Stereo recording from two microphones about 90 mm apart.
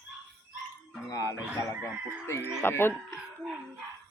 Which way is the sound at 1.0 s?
40° left (ahead or behind).